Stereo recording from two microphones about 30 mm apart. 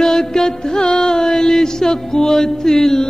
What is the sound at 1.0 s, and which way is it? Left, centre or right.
Chant, centre.